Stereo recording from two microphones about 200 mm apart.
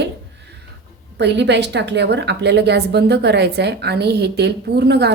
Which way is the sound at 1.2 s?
60° right (ahead or behind).